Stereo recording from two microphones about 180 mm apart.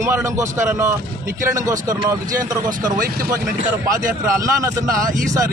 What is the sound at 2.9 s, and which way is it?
Speech, 55° right (ahead or behind).